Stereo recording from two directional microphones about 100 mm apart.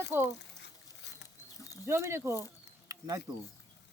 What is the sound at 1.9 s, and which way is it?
Speech, 25° right (ahead or behind).